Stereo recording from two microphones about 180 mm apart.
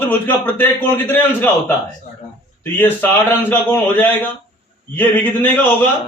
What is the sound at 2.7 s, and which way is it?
A man's voice, 10° left (ahead or behind).